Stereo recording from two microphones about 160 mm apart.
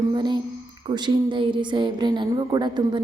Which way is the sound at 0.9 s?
25° right (ahead or behind).